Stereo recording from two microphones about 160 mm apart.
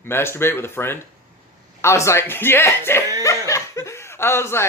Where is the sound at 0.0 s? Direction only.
15° left (ahead or behind).